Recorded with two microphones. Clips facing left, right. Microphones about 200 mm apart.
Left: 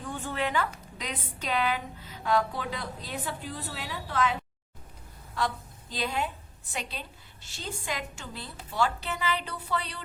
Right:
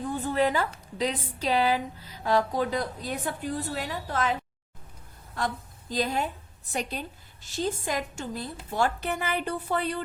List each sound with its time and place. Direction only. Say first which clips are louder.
0.1 s a woman's voice: right 5 dB; 35° right (ahead or behind)
5.9 s a woman's voice: right 4 dB; 40° right (ahead or behind)